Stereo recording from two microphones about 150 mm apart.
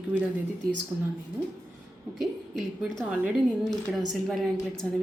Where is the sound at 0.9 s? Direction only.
15° right (ahead or behind).